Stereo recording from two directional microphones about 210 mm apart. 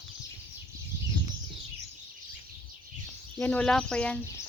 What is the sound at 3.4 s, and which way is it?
Speech, 5° left (ahead or behind).